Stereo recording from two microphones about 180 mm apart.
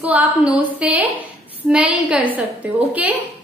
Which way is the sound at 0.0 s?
10° right (ahead or behind).